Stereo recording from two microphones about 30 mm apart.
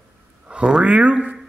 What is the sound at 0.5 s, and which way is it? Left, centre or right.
Speech, right.